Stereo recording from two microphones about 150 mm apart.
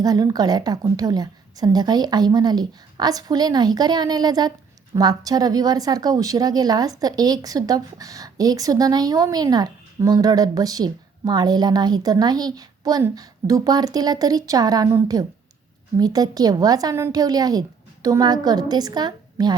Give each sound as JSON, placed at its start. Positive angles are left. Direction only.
{"t": 0.0, "sound": "speech", "side_deg": -25}